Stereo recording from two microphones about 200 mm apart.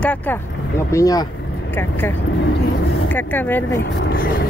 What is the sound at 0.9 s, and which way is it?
Speech, 15° left (ahead or behind).